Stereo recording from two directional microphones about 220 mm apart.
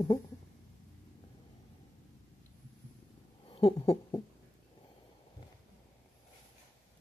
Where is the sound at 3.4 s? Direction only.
25° left (ahead or behind).